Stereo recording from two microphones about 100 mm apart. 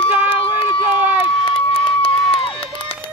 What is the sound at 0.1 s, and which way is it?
Run, 20° right (ahead or behind).